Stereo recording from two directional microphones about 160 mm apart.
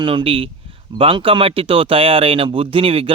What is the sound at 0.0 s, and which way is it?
Speech, 30° right (ahead or behind).